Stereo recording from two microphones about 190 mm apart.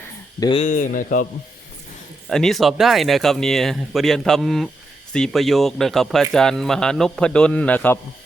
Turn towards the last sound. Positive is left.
turn(degrees=10)  # may be behind; listen again after turning